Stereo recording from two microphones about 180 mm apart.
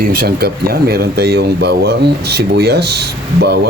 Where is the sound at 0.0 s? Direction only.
55° right (ahead or behind).